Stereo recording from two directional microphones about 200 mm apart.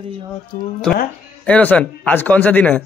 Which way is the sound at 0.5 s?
45° left (ahead or behind).